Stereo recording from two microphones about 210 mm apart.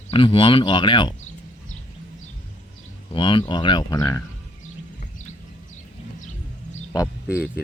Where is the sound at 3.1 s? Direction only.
25° left (ahead or behind).